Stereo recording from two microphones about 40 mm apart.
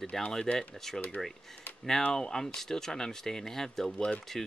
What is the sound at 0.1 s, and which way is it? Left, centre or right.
Speech, centre.